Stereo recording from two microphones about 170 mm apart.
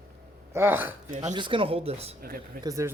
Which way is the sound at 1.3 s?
30° right (ahead or behind).